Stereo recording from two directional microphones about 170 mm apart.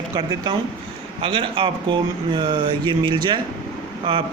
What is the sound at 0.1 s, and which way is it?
A man's voice, 25° right (ahead or behind).